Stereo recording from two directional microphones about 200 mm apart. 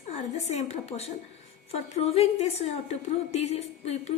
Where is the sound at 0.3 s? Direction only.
35° left (ahead or behind).